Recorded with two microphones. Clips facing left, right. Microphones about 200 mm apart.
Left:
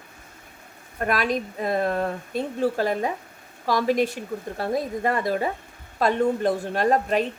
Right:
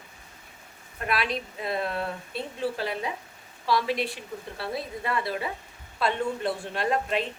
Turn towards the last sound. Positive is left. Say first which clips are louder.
# left 6 dB
turn(degrees=45)  # may be behind; listen again after turning